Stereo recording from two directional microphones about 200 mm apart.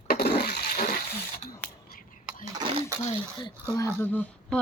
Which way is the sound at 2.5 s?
25° right (ahead or behind).